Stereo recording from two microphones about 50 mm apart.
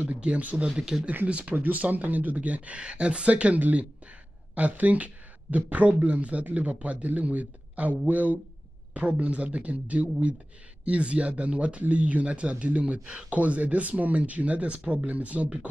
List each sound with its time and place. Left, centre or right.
0.2 s speech: right
0.7 s speech: centre
1.2 s speech: right